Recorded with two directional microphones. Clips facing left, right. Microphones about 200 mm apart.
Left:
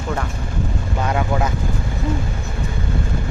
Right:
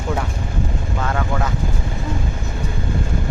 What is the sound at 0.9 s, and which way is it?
Vehicle, 20° left (ahead or behind).